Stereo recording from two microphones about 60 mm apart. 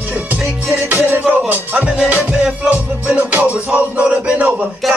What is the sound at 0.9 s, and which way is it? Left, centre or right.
Music, right.